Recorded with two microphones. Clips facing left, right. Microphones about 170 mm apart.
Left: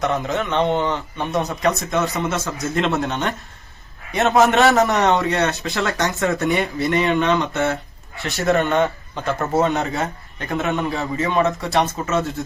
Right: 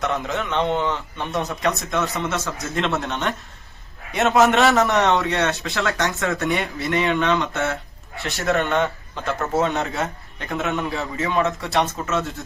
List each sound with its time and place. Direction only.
0.0 s a man's voice: centre (ahead or behind)